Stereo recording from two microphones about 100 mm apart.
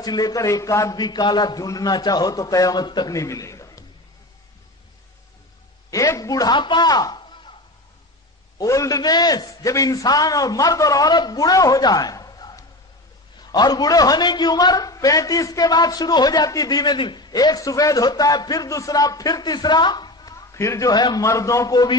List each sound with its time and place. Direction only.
0.0 s a man's voice: 40° left (ahead or behind)
0.9 s a man's voice: 45° left (ahead or behind)
3.2 s chuckle: 30° left (ahead or behind)
5.9 s a sound: 35° left (ahead or behind)
8.5 s a man's voice: 35° left (ahead or behind)
20.5 s a man's voice: 30° left (ahead or behind)
20.9 s a man's voice: 45° left (ahead or behind)
21.3 s a man's voice: 30° left (ahead or behind)